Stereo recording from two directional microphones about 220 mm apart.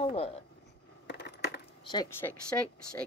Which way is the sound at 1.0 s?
55° left (ahead or behind).